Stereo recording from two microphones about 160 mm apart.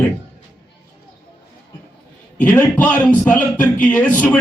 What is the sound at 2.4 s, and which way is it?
A man's voice, 10° left (ahead or behind).